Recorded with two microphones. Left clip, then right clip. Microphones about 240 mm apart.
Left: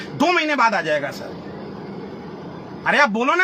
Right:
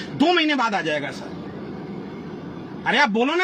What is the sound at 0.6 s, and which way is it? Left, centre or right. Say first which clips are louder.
Speech: left 4 dB; left.